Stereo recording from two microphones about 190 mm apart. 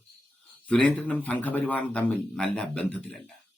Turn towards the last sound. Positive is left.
turn(degrees=5)  # may be behind; listen again after turning